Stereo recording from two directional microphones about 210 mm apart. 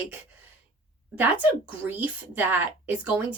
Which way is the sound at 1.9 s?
10° right (ahead or behind).